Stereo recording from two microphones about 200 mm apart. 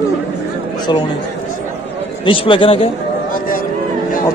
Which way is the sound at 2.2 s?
25° left (ahead or behind).